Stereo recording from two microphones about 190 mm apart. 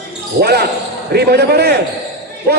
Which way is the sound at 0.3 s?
55° right (ahead or behind).